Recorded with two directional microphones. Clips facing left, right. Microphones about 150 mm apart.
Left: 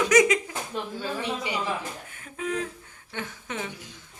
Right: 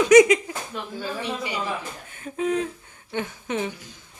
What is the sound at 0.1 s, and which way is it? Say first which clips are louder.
Speech: right 7 dB; 20° right (ahead or behind).